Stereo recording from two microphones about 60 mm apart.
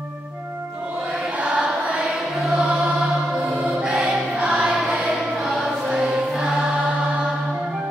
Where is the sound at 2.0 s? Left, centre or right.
Centre.